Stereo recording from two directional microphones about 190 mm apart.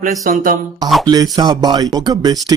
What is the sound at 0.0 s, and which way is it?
Speech, 45° right (ahead or behind).